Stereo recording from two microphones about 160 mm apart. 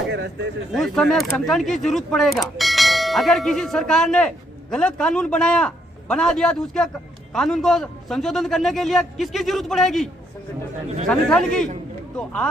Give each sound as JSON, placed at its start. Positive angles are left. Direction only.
{"t": 0.1, "sound": "a sound", "side_deg": -90}
{"t": 0.7, "sound": "speech", "side_deg": 0}
{"t": 11.1, "sound": "speech", "side_deg": 5}